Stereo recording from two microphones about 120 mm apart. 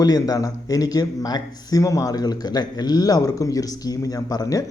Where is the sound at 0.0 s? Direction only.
30° left (ahead or behind).